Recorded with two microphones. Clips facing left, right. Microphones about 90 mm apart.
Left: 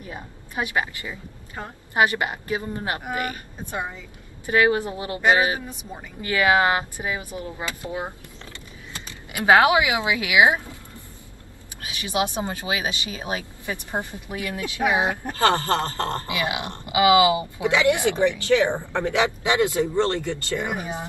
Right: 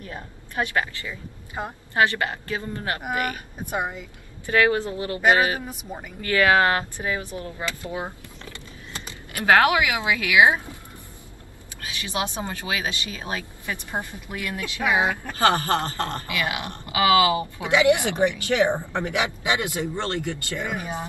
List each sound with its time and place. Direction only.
0.0 s a woman's voice: 15° left (ahead or behind)
1.6 s speech: 20° right (ahead or behind)
2.0 s a woman's voice: 20° left (ahead or behind)
4.5 s a woman's voice: 20° left (ahead or behind)
9.3 s a woman's voice: 20° left (ahead or behind)
11.9 s speech: 20° left (ahead or behind)
15.4 s speech: 20° right (ahead or behind)
16.2 s speech: 20° left (ahead or behind)
17.6 s a woman's voice: 20° right (ahead or behind)
20.5 s speech: 20° left (ahead or behind)